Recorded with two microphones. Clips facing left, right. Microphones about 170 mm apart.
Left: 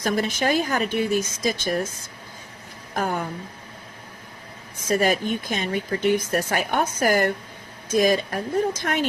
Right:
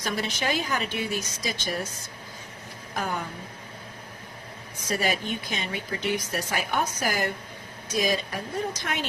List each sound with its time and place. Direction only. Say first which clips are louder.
0.0 s speech: left 6 dB; 50° left (ahead or behind)
2.9 s a woman's voice: left 5 dB; 45° left (ahead or behind)
4.9 s speech: left 6 dB; 45° left (ahead or behind)